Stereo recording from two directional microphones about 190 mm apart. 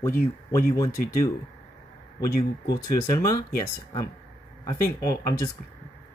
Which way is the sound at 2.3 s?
55° left (ahead or behind).